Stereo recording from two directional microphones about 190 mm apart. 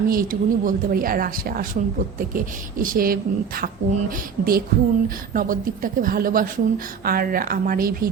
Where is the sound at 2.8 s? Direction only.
50° right (ahead or behind).